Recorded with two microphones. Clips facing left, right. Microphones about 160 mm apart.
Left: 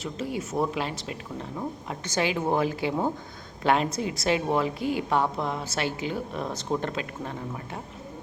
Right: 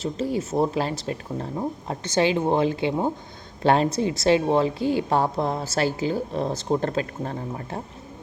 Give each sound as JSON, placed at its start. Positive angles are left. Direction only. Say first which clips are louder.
{"t": 0.0, "sound": "a woman's voice", "louder": "right 6 dB", "side_deg": -30}